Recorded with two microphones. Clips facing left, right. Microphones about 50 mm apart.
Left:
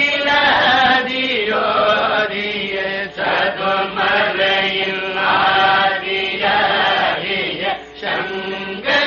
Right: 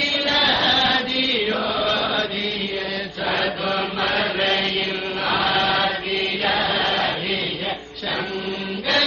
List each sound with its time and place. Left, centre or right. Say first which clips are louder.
0.0 s chant: left 6 dB; left
3.2 s mantra: left 6 dB; left
5.2 s chant: left 7 dB; left